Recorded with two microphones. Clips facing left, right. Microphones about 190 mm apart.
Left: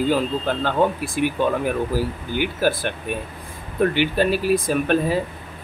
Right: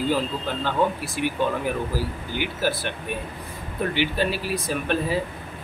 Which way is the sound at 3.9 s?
50° left (ahead or behind).